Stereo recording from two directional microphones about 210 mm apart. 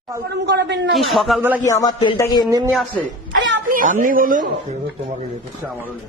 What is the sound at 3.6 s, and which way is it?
Speech, 40° right (ahead or behind).